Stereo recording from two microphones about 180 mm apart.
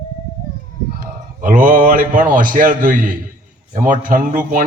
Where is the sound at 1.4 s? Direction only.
50° right (ahead or behind).